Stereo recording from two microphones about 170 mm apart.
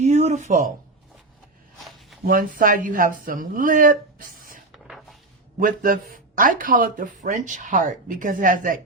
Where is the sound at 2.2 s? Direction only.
55° right (ahead or behind).